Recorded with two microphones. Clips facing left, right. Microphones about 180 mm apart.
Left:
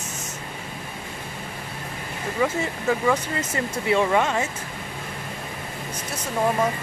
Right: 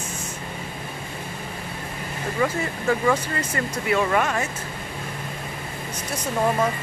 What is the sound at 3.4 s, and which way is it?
Speech, 25° left (ahead or behind).